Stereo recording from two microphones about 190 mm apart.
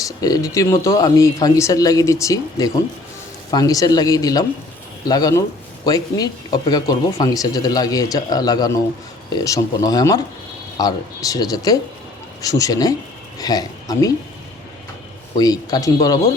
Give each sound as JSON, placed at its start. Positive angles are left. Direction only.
{"t": 0.0, "sound": "speech", "side_deg": 20}
{"t": 15.4, "sound": "speech", "side_deg": 20}